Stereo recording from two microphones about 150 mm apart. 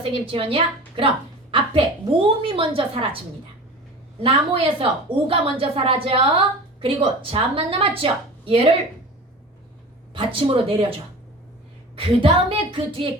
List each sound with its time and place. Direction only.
0.0 s a woman's voice: 35° right (ahead or behind)
4.2 s a woman's voice: 40° right (ahead or behind)
10.2 s a woman's voice: 35° right (ahead or behind)
11.9 s a woman's voice: 35° right (ahead or behind)